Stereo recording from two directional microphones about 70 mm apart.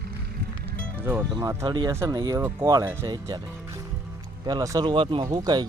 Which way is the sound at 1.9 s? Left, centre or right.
Right.